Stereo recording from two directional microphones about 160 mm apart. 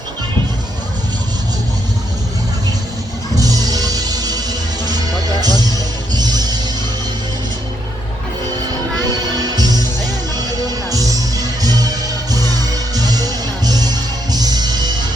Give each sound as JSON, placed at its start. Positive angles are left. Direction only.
{"t": 3.3, "sound": "music", "side_deg": -25}
{"t": 9.0, "sound": "music", "side_deg": -25}